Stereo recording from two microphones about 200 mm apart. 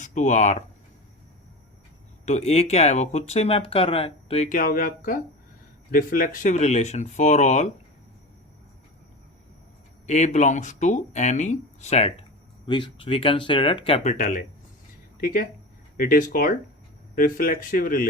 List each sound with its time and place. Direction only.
0.0 s speech: 35° left (ahead or behind)
2.2 s speech: 35° left (ahead or behind)
10.1 s speech: 35° left (ahead or behind)